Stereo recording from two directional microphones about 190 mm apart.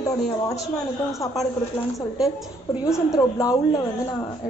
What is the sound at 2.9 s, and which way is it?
Speech, 15° left (ahead or behind).